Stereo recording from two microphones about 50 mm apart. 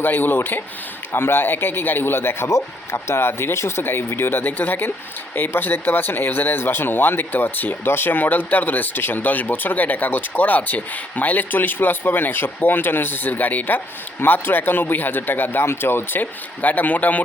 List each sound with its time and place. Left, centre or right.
0.0 s speech: left
2.5 s speech: left
15.6 s speech: left